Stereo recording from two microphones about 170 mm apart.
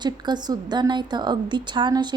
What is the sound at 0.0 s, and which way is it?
A woman's voice, 25° right (ahead or behind).